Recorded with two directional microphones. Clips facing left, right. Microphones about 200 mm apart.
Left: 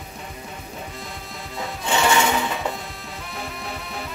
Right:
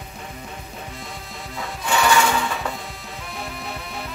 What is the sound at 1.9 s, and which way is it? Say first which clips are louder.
Music: right 1 dB; 25° left (ahead or behind).